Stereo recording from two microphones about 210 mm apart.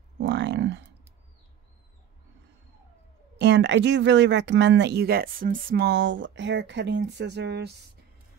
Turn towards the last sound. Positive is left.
turn(degrees=-55)  # may be behind; listen again after turning